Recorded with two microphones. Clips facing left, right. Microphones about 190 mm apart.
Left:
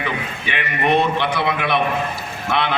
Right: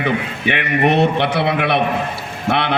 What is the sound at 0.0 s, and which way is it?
A man's voice, 65° right (ahead or behind).